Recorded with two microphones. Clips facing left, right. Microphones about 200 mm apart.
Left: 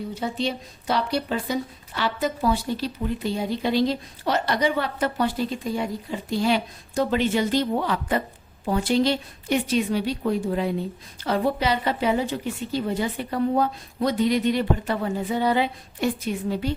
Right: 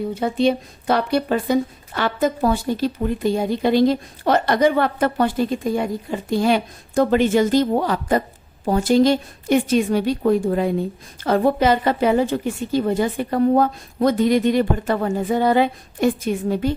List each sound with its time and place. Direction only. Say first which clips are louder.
0.1 s speech: right 9 dB; 55° right (ahead or behind)